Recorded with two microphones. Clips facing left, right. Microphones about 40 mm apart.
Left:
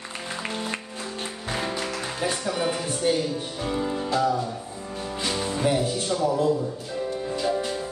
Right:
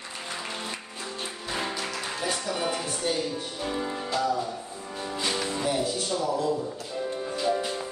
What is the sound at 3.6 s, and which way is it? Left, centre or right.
Music, centre.